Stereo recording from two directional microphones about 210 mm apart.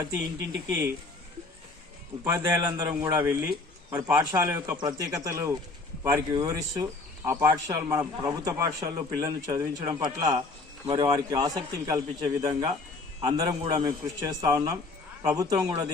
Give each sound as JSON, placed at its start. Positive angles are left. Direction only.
{"t": 2.2, "sound": "a man's voice", "side_deg": -10}